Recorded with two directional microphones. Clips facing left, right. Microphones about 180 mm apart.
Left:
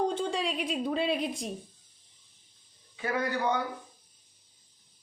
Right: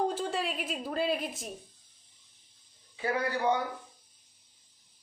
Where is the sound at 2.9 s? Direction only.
30° right (ahead or behind).